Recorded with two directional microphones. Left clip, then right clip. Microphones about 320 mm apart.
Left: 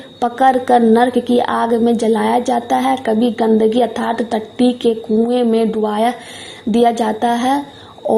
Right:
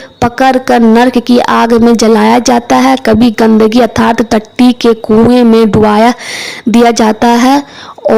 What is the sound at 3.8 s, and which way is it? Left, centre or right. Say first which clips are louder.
Speech: right 8 dB; right.